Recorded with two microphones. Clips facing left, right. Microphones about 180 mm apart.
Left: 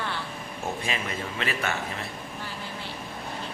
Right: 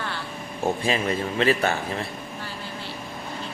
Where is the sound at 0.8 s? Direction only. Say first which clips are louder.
Right 7 dB; 35° right (ahead or behind).